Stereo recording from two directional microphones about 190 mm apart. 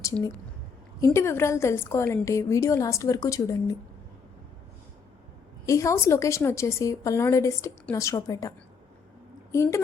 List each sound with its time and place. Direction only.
1.0 s a woman's voice: 15° left (ahead or behind)
5.6 s a woman's voice: 15° left (ahead or behind)